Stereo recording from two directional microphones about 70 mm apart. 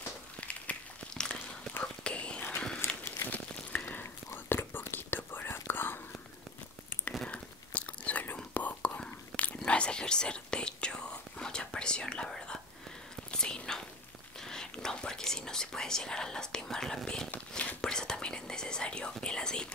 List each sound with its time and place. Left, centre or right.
0.4 s a sound: centre
1.8 s whispering: centre
2.8 s walk: left
3.3 s a sound: left
4.5 s whispering: left
7.2 s whispering: centre
9.3 s whispering: centre
9.7 s whispering: centre
17.3 s whispering: left
17.8 s whispering: centre